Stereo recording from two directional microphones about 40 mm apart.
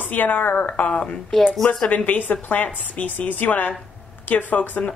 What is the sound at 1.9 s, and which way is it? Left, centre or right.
A woman's voice, left.